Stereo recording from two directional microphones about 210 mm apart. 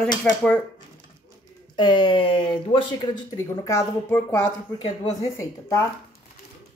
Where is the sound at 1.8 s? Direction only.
25° left (ahead or behind).